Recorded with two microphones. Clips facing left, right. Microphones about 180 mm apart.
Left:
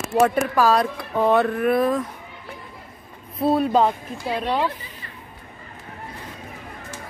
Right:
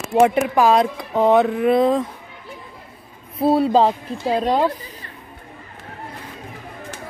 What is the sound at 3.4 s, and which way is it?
A woman's voice, 30° right (ahead or behind).